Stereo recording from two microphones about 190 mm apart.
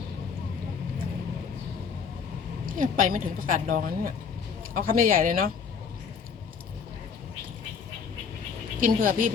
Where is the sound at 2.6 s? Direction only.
45° right (ahead or behind).